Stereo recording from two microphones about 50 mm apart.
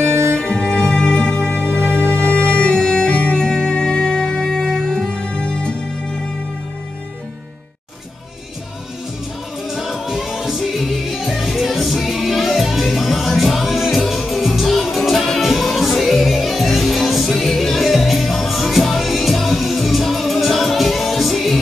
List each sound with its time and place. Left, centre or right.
0.4 s music: centre
1.6 s music: right
2.6 s music: centre
9.7 s music: centre